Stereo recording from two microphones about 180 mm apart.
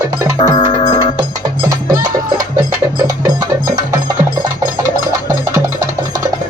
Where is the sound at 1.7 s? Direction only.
20° right (ahead or behind).